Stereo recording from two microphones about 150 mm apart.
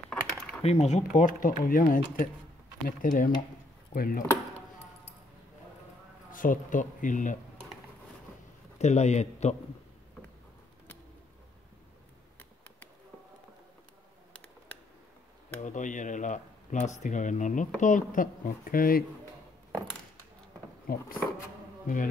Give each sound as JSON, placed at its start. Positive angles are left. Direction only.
{"t": 0.1, "sound": "a sound", "side_deg": 5}
{"t": 0.6, "sound": "speech", "side_deg": 45}
{"t": 6.3, "sound": "speech", "side_deg": 65}
{"t": 8.7, "sound": "a man's voice", "side_deg": 50}
{"t": 15.6, "sound": "speech", "side_deg": 55}
{"t": 20.9, "sound": "speech", "side_deg": 80}
{"t": 21.8, "sound": "speech", "side_deg": 65}